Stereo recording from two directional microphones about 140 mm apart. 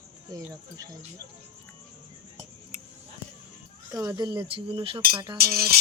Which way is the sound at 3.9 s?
25° right (ahead or behind).